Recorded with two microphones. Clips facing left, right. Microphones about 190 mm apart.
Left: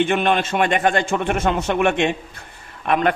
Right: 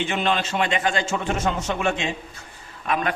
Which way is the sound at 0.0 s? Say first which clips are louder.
Left 5 dB; 55° left (ahead or behind).